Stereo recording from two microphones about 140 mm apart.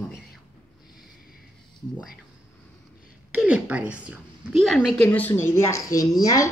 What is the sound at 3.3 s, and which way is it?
A woman's voice, 10° right (ahead or behind).